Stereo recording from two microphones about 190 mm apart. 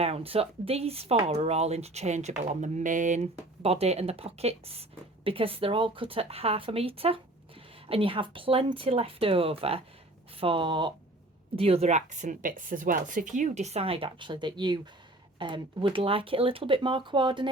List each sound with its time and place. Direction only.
0.0 s speech: 30° right (ahead or behind)